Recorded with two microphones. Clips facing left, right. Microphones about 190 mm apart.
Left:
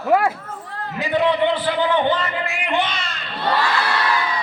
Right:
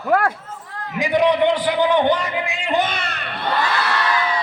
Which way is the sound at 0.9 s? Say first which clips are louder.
Right 2 dB; 15° right (ahead or behind).